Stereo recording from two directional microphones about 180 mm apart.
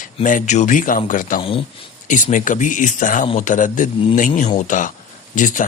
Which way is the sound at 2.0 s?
45° left (ahead or behind).